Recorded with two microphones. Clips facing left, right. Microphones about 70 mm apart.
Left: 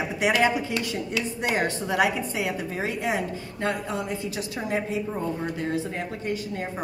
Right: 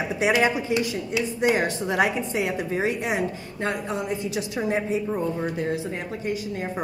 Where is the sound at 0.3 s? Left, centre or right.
Centre.